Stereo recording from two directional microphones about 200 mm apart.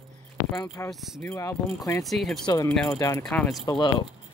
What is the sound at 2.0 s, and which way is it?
Speech, centre (ahead or behind).